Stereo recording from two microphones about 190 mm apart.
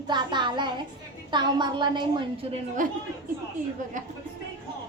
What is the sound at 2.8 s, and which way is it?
Speech, 45° right (ahead or behind).